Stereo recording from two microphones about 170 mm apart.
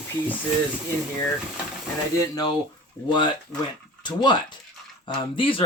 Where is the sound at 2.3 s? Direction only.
25° left (ahead or behind).